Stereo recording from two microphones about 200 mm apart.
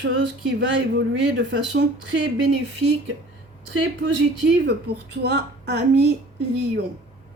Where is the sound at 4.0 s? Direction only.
60° right (ahead or behind).